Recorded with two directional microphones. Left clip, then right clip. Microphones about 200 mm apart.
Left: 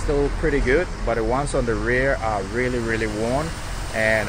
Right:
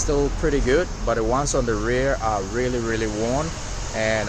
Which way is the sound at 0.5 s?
10° right (ahead or behind).